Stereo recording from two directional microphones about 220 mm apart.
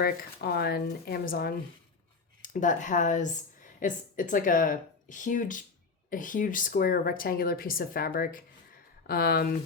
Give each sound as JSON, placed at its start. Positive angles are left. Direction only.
{"t": 0.0, "sound": "speech", "side_deg": 45}